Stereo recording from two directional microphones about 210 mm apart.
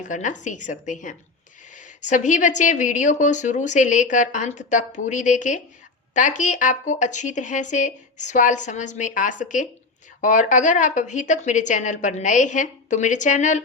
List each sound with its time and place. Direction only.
0.0 s a woman's voice: 35° left (ahead or behind)